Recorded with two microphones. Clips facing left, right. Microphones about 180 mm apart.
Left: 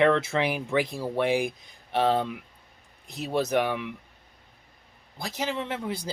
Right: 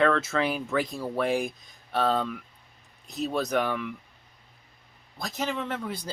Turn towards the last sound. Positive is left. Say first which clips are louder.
# even
turn(degrees=10)  # may be behind; listen again after turning